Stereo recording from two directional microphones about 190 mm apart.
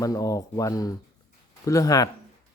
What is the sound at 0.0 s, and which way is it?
Speech, 20° left (ahead or behind).